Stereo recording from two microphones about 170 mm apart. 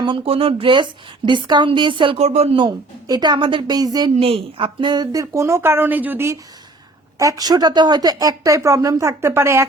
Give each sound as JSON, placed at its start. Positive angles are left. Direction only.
{"t": 0.0, "sound": "a woman's voice", "side_deg": -30}
{"t": 4.1, "sound": "a woman's voice", "side_deg": -35}